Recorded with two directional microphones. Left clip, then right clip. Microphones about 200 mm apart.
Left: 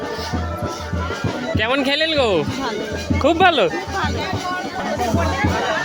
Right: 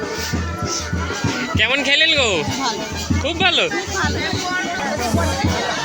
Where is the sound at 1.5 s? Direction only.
30° left (ahead or behind).